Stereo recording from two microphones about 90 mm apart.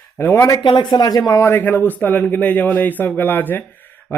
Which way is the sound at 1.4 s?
25° left (ahead or behind).